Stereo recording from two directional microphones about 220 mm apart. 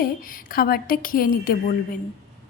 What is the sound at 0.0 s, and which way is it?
A woman's voice, 40° left (ahead or behind).